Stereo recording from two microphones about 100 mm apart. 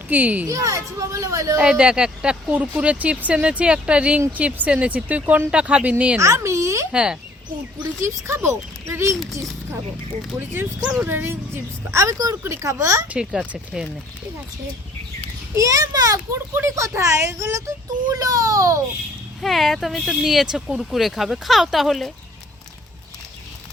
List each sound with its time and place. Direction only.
0.1 s speech: 15° right (ahead or behind)
0.4 s speech: 35° right (ahead or behind)
1.5 s speech: 10° right (ahead or behind)
6.1 s a child's voice: 30° right (ahead or behind)
6.9 s speech: 10° right (ahead or behind)
8.0 s speech: 25° right (ahead or behind)
11.0 s speech: 20° right (ahead or behind)
13.1 s speech: 10° right (ahead or behind)
15.5 s speech: 35° right (ahead or behind)
16.3 s speech: 25° right (ahead or behind)
18.1 s speech: 35° right (ahead or behind)
19.4 s speech: centre (ahead or behind)